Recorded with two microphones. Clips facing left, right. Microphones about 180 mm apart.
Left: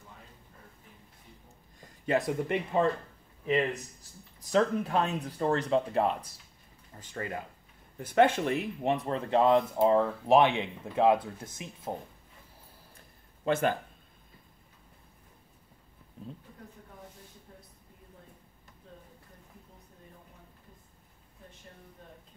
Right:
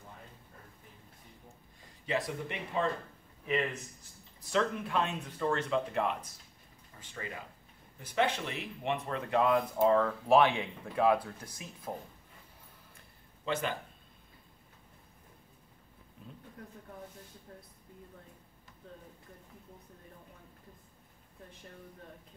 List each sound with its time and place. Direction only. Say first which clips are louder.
2.0 s speech: left 6 dB; 50° left (ahead or behind)
4.5 s speech: left 5 dB; 40° left (ahead or behind)
7.0 s speech: left 6 dB; 50° left (ahead or behind); by 11.9 s 25° left (ahead or behind)
13.5 s speech: left 7 dB; 50° left (ahead or behind)